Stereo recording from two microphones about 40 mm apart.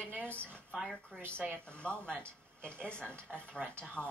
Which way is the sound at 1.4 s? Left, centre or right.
Right.